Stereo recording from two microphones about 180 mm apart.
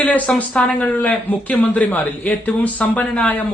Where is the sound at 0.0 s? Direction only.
10° left (ahead or behind).